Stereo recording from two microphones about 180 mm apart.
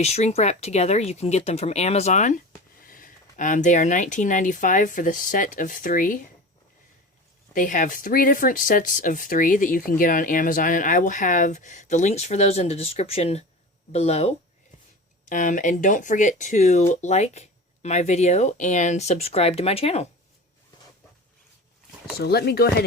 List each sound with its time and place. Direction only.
0.0 s speech: 35° left (ahead or behind)
7.5 s speech: 45° left (ahead or behind)
22.2 s speech: 65° left (ahead or behind)